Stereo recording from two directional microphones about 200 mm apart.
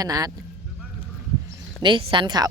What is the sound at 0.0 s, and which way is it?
Speech, 20° right (ahead or behind).